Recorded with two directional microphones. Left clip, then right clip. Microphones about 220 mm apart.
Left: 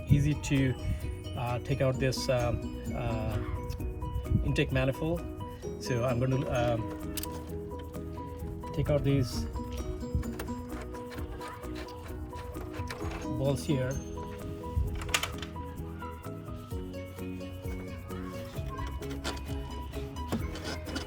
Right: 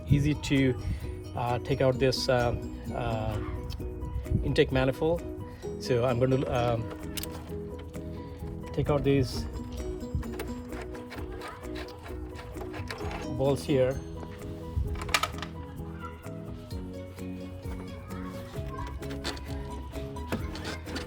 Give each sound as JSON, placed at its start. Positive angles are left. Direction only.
{"t": 0.1, "sound": "speech", "side_deg": -30}
{"t": 4.5, "sound": "speech", "side_deg": -35}
{"t": 8.7, "sound": "speech", "side_deg": -30}
{"t": 12.9, "sound": "music", "side_deg": 0}
{"t": 13.4, "sound": "speech", "side_deg": -30}
{"t": 19.0, "sound": "music", "side_deg": 0}